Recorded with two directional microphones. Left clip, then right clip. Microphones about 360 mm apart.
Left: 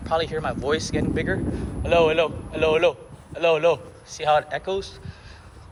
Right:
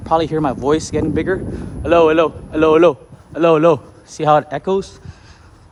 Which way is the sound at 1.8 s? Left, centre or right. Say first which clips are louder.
Right 7 dB; right.